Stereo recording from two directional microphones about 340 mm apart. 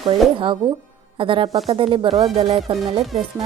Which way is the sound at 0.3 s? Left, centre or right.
Centre.